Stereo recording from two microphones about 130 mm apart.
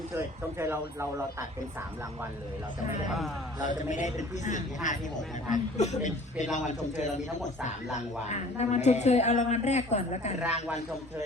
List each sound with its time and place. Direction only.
0.1 s speech: 20° right (ahead or behind)
3.1 s a man's voice: centre (ahead or behind)
3.6 s a man's voice: 70° left (ahead or behind)